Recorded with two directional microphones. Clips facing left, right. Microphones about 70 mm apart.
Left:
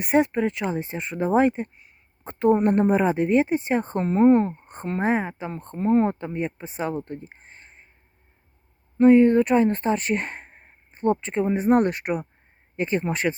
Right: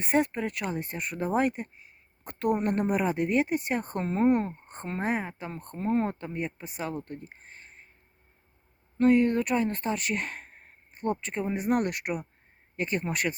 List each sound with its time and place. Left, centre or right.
0.0 s speech: left
5.7 s speech: centre
6.1 s speech: left
9.0 s speech: left